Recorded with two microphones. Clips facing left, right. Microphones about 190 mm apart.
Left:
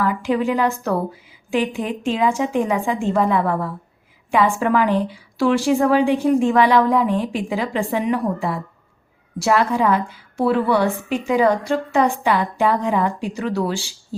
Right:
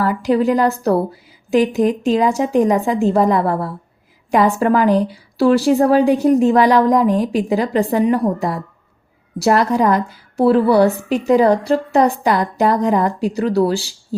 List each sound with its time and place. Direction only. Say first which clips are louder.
0.0 s a woman's voice: right 4 dB; 40° right (ahead or behind)